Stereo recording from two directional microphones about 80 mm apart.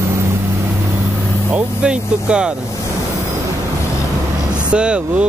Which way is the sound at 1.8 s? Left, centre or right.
Centre.